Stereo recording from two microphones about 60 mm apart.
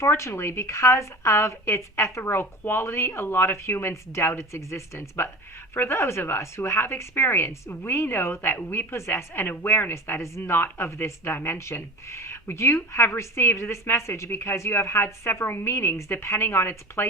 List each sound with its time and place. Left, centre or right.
0.0 s speech: left